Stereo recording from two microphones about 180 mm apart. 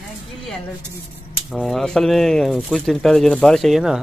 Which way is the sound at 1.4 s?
Centre (ahead or behind).